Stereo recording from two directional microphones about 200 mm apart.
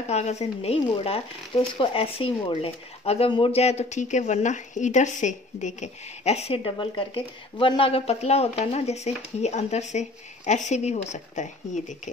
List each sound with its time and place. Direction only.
0.1 s speech: 35° left (ahead or behind)